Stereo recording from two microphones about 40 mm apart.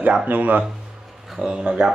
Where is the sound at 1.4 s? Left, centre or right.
Right.